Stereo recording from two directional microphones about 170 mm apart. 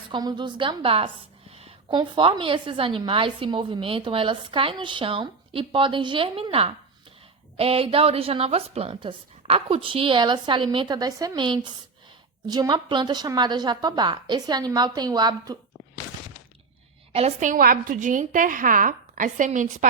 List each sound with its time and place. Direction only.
0.1 s a woman's voice: 25° right (ahead or behind)
17.1 s a woman's voice: 35° right (ahead or behind)
17.5 s a woman's voice: 55° right (ahead or behind)